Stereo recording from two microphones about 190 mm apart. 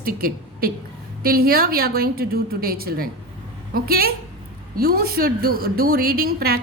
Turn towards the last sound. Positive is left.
turn(degrees=-50)  # may be behind; listen again after turning